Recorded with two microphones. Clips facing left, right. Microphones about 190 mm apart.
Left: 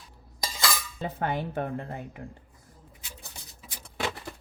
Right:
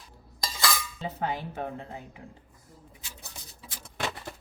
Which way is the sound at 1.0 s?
55° left (ahead or behind).